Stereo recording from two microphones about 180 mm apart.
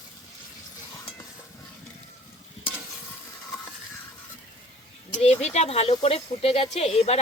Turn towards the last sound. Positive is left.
turn(degrees=35)  # may be behind; listen again after turning